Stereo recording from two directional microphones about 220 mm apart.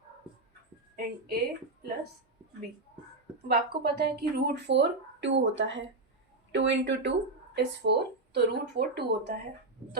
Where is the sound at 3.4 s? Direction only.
45° right (ahead or behind).